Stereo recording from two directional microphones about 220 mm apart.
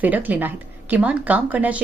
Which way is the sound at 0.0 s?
10° right (ahead or behind).